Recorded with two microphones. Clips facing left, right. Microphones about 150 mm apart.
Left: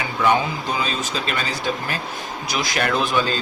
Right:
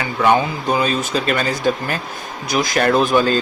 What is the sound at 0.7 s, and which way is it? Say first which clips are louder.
Speech: right 10 dB; 55° right (ahead or behind).